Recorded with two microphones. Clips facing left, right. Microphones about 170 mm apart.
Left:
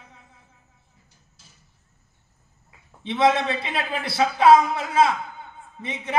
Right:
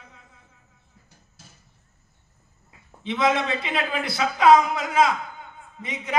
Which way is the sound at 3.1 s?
30° left (ahead or behind).